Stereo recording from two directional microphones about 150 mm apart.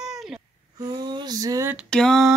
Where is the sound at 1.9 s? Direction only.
5° left (ahead or behind).